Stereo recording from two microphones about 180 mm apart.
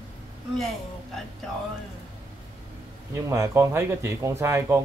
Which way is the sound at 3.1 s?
15° right (ahead or behind).